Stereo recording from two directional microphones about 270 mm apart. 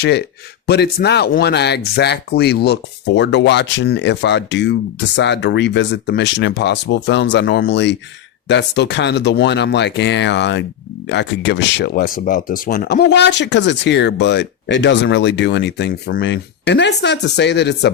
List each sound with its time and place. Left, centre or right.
0.0 s speech: left